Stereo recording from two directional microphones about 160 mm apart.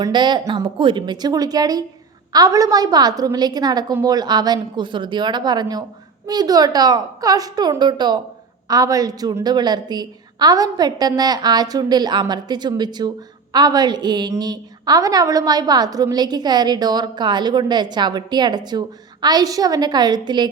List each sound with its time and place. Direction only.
0.0 s a woman's voice: 30° right (ahead or behind)